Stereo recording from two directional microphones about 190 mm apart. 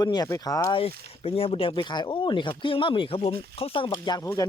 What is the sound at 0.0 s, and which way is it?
Speech, 20° left (ahead or behind).